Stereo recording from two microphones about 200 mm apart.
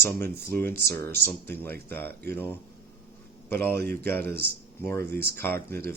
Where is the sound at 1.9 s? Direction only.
50° right (ahead or behind).